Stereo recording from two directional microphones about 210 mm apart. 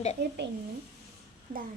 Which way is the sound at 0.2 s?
55° right (ahead or behind).